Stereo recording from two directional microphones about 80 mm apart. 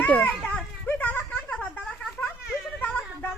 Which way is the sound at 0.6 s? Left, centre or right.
Centre.